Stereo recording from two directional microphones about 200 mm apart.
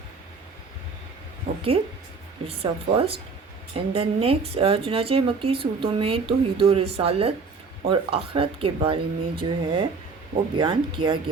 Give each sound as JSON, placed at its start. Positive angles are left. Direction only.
{"t": 2.5, "sound": "a woman's voice", "side_deg": -30}